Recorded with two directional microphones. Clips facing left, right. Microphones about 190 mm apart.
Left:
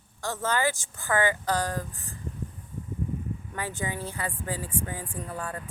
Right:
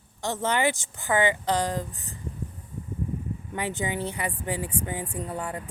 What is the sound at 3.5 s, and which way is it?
Speech, 20° right (ahead or behind).